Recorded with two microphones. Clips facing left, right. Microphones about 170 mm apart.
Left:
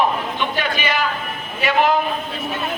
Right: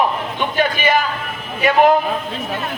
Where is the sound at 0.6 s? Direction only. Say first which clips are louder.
Right 9 dB; 50° right (ahead or behind).